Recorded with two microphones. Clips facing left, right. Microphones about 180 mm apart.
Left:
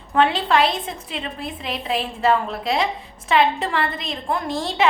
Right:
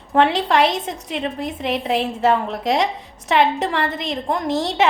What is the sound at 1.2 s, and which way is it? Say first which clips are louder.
A woman's voice: right 8 dB; 75° right (ahead or behind).